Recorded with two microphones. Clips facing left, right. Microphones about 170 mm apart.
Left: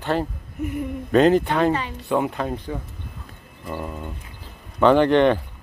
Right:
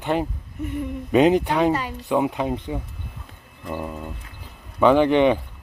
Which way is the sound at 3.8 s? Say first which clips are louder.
Right 1 dB; 5° right (ahead or behind).